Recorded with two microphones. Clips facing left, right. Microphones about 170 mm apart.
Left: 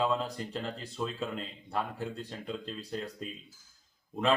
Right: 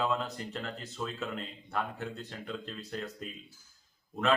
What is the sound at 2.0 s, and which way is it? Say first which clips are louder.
A man's voice: left 2 dB; 30° left (ahead or behind).